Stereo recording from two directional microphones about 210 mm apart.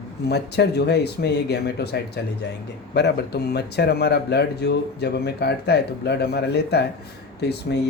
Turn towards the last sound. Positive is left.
turn(degrees=55)  # may be behind; listen again after turning